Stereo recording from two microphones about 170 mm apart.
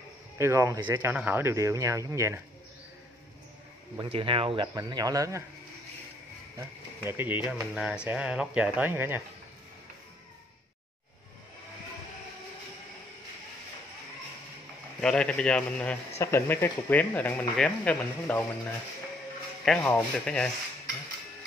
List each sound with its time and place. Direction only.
0.4 s speech: 15° right (ahead or behind)
0.7 s speech: 25° right (ahead or behind)
1.1 s speech: 10° right (ahead or behind)
4.1 s speech: 35° right (ahead or behind)
7.1 s speech: 10° right (ahead or behind)
15.0 s a man's voice: 5° left (ahead or behind)
19.6 s a man's voice: 5° left (ahead or behind)